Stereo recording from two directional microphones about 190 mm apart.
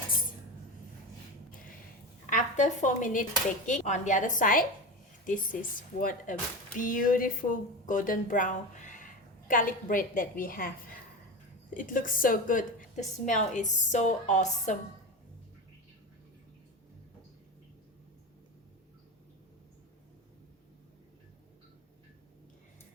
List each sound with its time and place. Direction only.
2.2 s a woman's voice: 40° left (ahead or behind)
11.7 s a woman's voice: 45° left (ahead or behind)